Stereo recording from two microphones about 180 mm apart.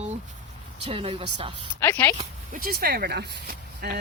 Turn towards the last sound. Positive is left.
turn(degrees=-60)  # may be behind; listen again after turning